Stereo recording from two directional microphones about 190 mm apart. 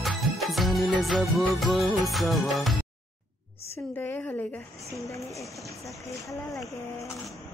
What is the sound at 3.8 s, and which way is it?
Speech, 10° left (ahead or behind).